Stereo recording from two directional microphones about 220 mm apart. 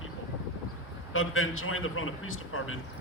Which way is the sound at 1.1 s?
70° left (ahead or behind).